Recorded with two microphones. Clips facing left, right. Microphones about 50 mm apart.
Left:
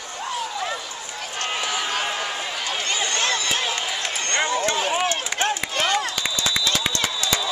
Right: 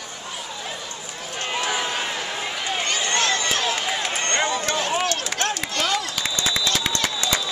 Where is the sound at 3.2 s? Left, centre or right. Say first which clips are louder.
Right 1 dB; centre.